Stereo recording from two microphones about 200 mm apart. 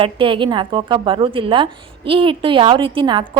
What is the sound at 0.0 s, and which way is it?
A woman's voice, 25° right (ahead or behind).